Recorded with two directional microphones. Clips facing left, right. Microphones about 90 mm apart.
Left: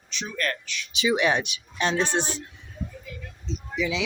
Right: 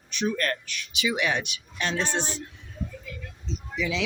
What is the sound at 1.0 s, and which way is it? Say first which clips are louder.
Speech: left 4 dB; 30° left (ahead or behind).